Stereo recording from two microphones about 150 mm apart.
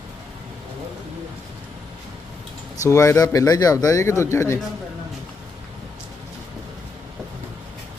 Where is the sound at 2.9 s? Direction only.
20° left (ahead or behind).